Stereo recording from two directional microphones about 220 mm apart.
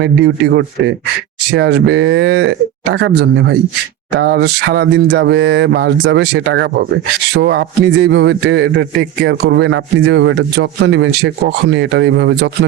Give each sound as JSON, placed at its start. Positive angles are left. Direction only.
{"t": 0.0, "sound": "a man's voice", "side_deg": -50}